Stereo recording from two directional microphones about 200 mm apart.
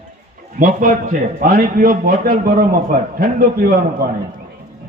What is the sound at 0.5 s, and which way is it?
A man's voice, 40° right (ahead or behind).